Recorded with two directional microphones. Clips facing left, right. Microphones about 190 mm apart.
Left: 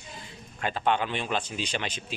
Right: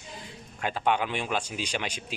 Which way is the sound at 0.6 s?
10° right (ahead or behind).